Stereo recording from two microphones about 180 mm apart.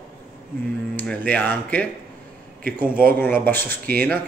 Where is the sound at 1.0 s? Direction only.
10° left (ahead or behind).